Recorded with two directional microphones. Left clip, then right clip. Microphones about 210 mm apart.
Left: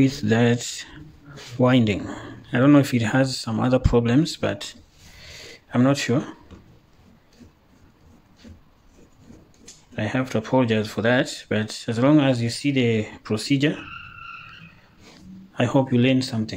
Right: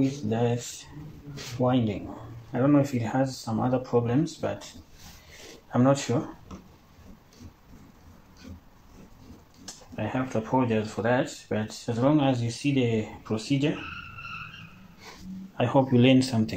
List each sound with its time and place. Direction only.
0.1 s speech: 45° left (ahead or behind)
5.7 s speech: 30° left (ahead or behind)
9.9 s speech: 40° left (ahead or behind)
15.5 s speech: 35° left (ahead or behind)
15.9 s speech: 10° left (ahead or behind)